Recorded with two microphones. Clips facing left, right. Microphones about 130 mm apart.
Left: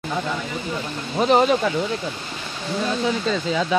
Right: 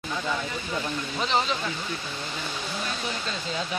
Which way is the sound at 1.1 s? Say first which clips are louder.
Left 11 dB; 50° left (ahead or behind).